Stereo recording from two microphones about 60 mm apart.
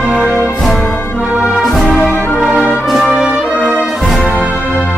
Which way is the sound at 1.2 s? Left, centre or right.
Right.